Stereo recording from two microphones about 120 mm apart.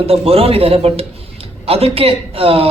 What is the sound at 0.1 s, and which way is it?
A man's voice, 55° right (ahead or behind).